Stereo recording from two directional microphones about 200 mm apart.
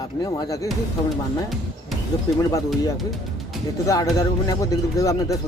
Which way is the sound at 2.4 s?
15° left (ahead or behind).